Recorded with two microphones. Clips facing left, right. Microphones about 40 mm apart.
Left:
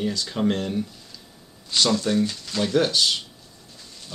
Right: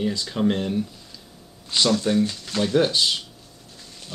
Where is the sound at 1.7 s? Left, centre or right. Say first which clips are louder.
Even; right.